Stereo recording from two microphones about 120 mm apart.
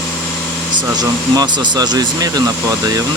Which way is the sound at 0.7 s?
40° right (ahead or behind).